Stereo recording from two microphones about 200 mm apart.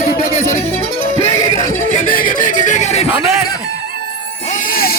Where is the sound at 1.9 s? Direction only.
45° left (ahead or behind).